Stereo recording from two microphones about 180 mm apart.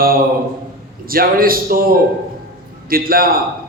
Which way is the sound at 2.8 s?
55° right (ahead or behind).